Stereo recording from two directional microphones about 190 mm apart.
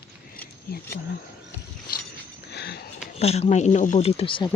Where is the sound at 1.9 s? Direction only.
50° left (ahead or behind).